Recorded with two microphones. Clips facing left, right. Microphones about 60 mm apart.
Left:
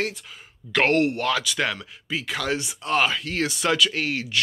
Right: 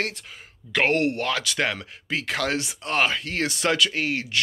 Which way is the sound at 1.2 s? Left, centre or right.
Right.